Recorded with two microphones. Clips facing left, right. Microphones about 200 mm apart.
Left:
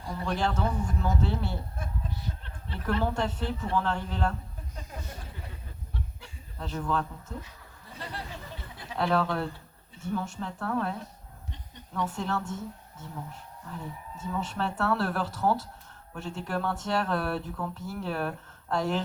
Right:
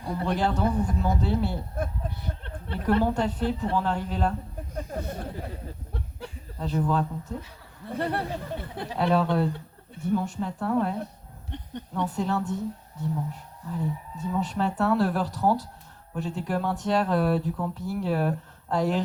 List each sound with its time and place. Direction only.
0.3 s speech: 15° right (ahead or behind)
1.8 s a sound: 60° right (ahead or behind)
3.0 s speech: 15° right (ahead or behind)
4.7 s speech: 55° right (ahead or behind)
6.6 s speech: 15° right (ahead or behind)
7.9 s speech: 60° right (ahead or behind)
9.0 s speech: 15° right (ahead or behind)
11.5 s a sound: 60° right (ahead or behind)
11.9 s speech: 15° right (ahead or behind)
14.2 s speech: 15° right (ahead or behind)